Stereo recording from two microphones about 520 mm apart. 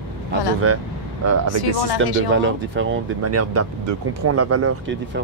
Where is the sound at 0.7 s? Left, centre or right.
Right.